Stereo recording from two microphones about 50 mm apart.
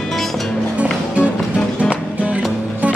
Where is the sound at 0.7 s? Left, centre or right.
Right.